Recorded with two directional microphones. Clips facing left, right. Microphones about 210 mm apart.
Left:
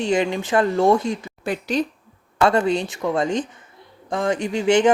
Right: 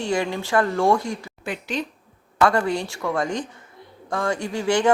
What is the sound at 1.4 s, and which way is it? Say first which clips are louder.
Speech: left 6 dB; 40° left (ahead or behind).